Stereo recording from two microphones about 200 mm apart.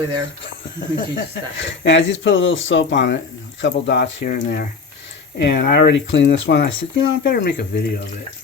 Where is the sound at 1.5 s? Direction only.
65° left (ahead or behind).